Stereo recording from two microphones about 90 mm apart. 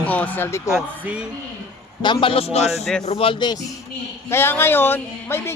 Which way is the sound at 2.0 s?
65° left (ahead or behind).